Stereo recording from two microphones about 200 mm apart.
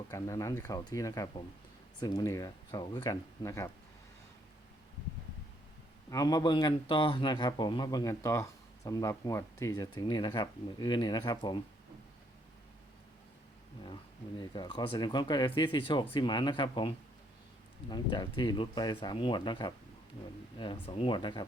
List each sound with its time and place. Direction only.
0.1 s speech: 15° left (ahead or behind)
6.1 s speech: 20° left (ahead or behind)
13.8 s speech: 20° left (ahead or behind)